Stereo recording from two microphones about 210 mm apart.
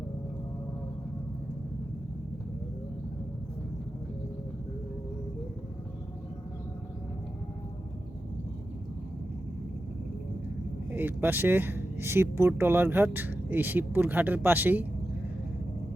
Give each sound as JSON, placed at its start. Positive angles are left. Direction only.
{"t": 10.9, "sound": "speech", "side_deg": -10}